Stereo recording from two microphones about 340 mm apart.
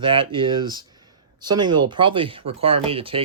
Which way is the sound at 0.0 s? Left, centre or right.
Centre.